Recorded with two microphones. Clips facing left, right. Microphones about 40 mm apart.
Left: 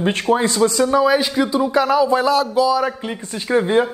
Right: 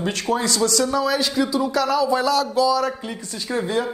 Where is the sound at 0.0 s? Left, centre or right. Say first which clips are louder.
Left 5 dB; left.